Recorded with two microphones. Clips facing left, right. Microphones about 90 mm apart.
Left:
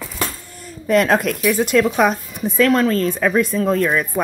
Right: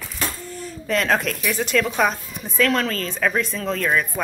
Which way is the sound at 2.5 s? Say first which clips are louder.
Left 5 dB; 30° left (ahead or behind).